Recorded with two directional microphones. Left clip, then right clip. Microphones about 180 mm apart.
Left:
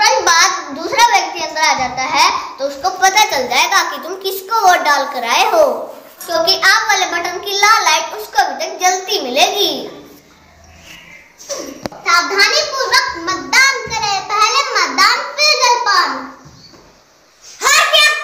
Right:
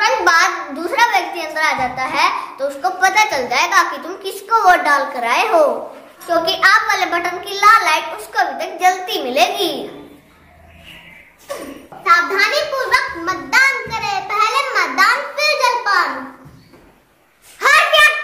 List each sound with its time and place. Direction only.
0.0 s a sound: 15° right (ahead or behind)
2.8 s a child's voice: 5° right (ahead or behind)
12.0 s a child's voice: 15° right (ahead or behind)
17.6 s a child's voice: 10° right (ahead or behind)